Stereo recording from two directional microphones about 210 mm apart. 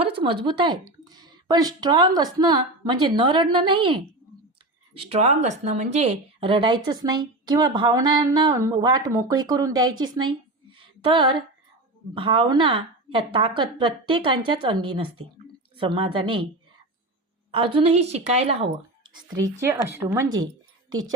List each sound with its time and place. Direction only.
0.0 s a woman's voice: 25° right (ahead or behind)
4.9 s a woman's voice: 30° right (ahead or behind)
10.2 s a sound: 25° right (ahead or behind)
12.1 s a woman's voice: 25° right (ahead or behind)
17.5 s a woman's voice: 25° right (ahead or behind)
19.5 s speech: 15° right (ahead or behind)